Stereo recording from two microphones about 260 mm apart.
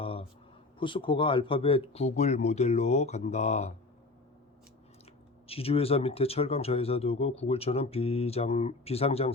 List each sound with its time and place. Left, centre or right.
0.0 s a sound: left
0.8 s speech: centre
5.5 s speech: left